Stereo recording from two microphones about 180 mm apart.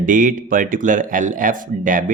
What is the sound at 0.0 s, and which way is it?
Speech, 45° right (ahead or behind).